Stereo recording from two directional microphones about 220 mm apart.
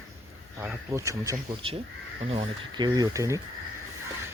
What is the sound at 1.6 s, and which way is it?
Speech, 25° right (ahead or behind).